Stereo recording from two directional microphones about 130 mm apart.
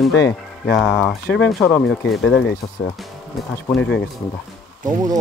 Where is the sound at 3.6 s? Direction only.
10° left (ahead or behind).